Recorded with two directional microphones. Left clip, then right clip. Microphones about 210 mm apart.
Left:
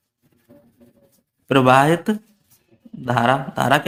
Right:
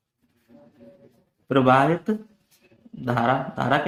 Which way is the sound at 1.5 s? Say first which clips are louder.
Left 4 dB; 35° left (ahead or behind).